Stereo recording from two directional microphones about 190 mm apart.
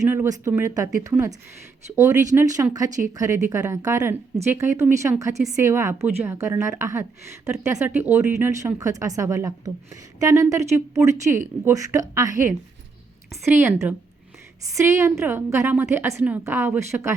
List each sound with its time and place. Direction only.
0.1 s a woman's voice: 15° right (ahead or behind)